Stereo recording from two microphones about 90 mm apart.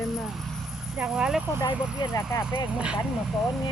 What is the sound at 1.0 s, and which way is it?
Speech, 10° right (ahead or behind).